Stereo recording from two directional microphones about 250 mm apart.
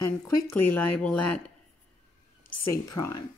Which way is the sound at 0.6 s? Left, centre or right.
Left.